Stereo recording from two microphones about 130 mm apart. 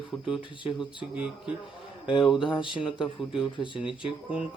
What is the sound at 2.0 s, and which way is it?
Speech, 40° left (ahead or behind).